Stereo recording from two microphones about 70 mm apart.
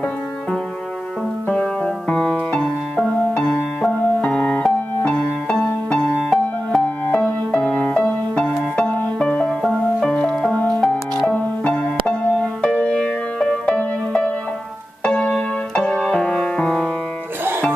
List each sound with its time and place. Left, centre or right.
1.5 s music: centre
9.5 s music: centre